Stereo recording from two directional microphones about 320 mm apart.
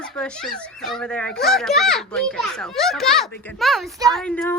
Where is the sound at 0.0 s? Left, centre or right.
Centre.